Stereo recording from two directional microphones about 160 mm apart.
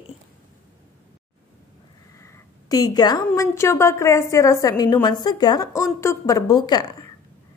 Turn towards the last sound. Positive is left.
turn(degrees=25)  # may be behind; listen again after turning